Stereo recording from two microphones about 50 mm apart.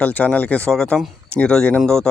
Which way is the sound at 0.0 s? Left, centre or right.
Left.